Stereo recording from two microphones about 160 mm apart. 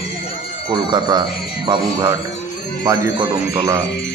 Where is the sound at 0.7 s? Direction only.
25° right (ahead or behind).